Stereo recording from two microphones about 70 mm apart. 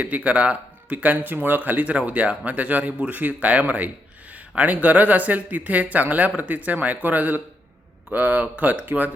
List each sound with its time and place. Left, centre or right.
0.0 s speech: right